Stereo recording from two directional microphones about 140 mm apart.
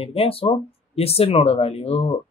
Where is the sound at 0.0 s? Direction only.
45° left (ahead or behind).